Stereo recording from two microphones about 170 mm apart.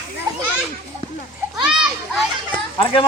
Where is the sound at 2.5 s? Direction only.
30° left (ahead or behind).